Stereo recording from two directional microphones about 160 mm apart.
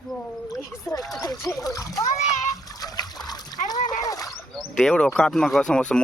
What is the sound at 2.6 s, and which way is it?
Splash, 25° left (ahead or behind).